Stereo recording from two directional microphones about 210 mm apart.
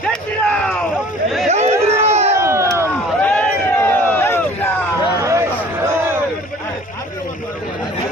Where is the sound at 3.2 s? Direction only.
5° left (ahead or behind).